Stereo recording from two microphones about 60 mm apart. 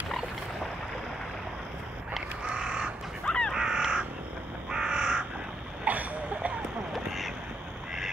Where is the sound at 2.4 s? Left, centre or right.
Centre.